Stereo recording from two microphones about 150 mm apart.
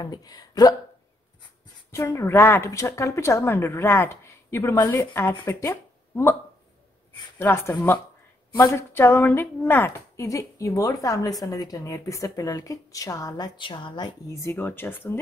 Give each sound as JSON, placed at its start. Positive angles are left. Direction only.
{"t": 0.0, "sound": "a woman's voice", "side_deg": 25}
{"t": 1.9, "sound": "a woman's voice", "side_deg": 20}
{"t": 7.3, "sound": "a woman's voice", "side_deg": 15}